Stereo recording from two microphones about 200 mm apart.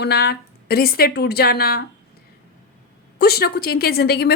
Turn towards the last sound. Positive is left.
turn(degrees=50)  # may be behind; listen again after turning